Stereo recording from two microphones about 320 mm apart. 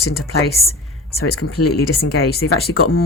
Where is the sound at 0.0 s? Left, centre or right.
Left.